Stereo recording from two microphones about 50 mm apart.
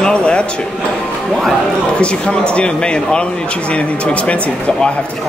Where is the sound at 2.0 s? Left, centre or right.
Left.